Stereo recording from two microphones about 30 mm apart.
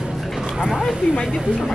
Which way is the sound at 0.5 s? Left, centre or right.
Right.